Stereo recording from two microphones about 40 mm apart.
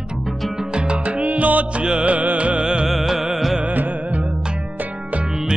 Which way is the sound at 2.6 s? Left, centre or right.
Right.